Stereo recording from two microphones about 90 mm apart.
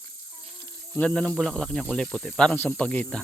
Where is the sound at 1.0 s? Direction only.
15° left (ahead or behind).